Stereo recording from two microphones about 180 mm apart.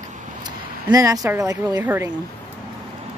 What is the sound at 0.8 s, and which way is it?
Speech, 20° right (ahead or behind).